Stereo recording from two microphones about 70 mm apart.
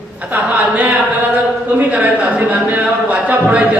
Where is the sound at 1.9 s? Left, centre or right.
Centre.